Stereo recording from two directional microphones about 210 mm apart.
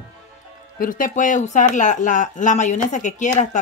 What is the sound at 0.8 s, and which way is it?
Speech, 40° left (ahead or behind).